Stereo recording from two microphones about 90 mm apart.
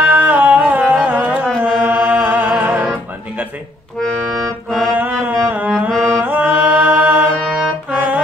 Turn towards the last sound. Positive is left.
turn(degrees=-15)  # may be behind; listen again after turning